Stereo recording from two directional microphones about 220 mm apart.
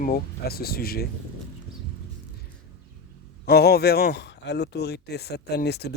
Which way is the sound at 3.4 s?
45° left (ahead or behind).